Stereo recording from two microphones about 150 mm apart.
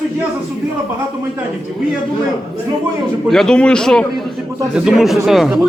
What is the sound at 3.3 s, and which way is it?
A man's voice, 5° left (ahead or behind).